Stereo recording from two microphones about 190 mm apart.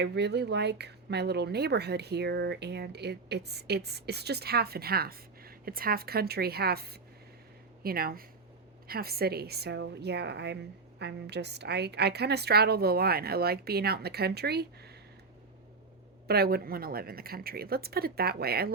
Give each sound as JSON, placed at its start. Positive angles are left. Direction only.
{"t": 0.0, "sound": "a woman's voice", "side_deg": -60}
{"t": 16.2, "sound": "a woman's voice", "side_deg": -55}